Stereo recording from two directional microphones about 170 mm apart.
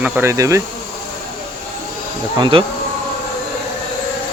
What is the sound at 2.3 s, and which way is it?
Speech, 25° right (ahead or behind).